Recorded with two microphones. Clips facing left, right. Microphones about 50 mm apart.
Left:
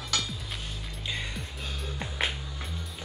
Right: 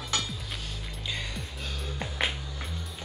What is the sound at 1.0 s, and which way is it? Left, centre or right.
Music, centre.